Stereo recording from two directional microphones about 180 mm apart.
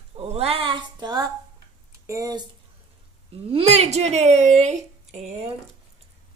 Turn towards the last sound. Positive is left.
turn(degrees=-35)  # may be behind; listen again after turning